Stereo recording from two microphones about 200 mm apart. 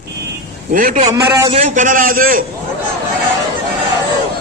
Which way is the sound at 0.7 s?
40° right (ahead or behind).